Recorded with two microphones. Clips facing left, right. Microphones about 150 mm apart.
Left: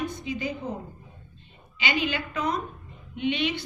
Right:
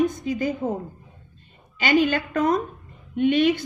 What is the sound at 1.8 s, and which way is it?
A woman's voice, 45° right (ahead or behind).